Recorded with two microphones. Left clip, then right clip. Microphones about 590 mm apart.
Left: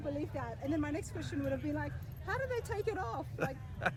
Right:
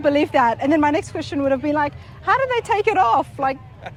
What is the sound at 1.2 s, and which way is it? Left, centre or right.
Speech, right.